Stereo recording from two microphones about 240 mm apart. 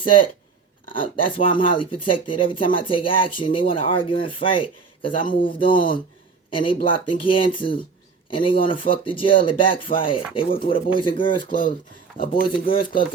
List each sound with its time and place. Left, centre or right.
0.0 s speech: left
12.1 s speech: left